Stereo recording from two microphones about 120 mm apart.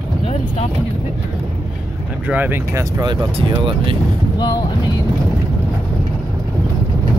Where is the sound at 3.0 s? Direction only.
40° right (ahead or behind).